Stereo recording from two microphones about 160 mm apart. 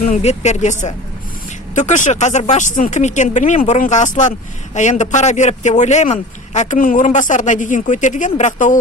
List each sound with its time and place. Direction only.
0.0 s speech: 45° left (ahead or behind)